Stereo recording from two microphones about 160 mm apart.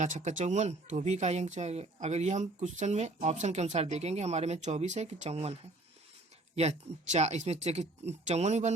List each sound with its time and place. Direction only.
0.0 s speech: 50° right (ahead or behind)
6.6 s speech: 45° right (ahead or behind)